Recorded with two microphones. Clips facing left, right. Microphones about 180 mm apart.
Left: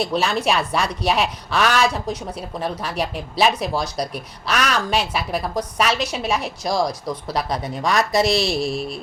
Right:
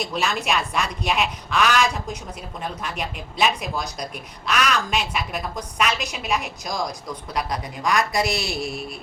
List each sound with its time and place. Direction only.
0.0 s speech: 30° left (ahead or behind)